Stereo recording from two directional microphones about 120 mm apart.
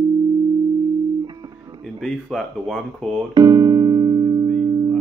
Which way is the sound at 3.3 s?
35° right (ahead or behind).